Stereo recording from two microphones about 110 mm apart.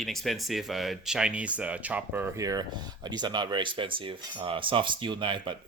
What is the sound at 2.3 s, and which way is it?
Speech, 30° right (ahead or behind).